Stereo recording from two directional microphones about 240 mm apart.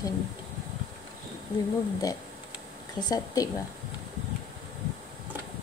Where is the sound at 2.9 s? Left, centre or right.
Centre.